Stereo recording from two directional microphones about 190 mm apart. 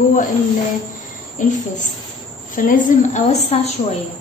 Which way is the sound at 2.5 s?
45° left (ahead or behind).